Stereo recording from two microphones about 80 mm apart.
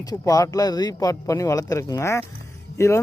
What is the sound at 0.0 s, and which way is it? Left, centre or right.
Speech, left.